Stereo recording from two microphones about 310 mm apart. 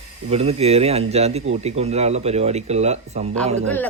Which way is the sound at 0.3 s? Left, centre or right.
Centre.